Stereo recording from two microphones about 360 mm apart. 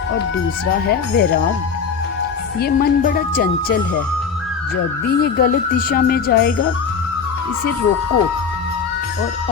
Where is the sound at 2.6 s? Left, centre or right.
Left.